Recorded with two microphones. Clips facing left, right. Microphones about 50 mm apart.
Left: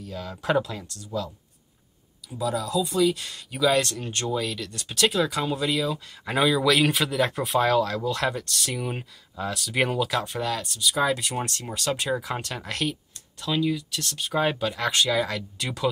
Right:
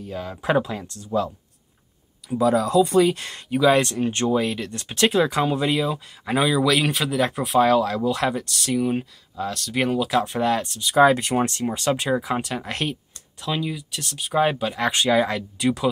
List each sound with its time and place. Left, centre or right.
0.0 s speech: right
3.4 s speech: right
6.2 s speech: centre
10.0 s speech: centre
10.4 s speech: right
11.3 s speech: right
15.6 s speech: centre